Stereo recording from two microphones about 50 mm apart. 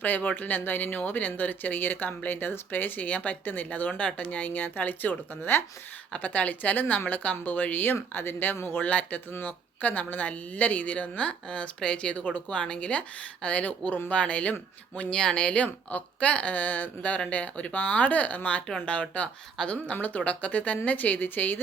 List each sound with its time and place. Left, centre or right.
0.0 s speech: left
6.1 s speech: left
8.9 s speech: left
15.1 s speech: centre; by 21.6 s left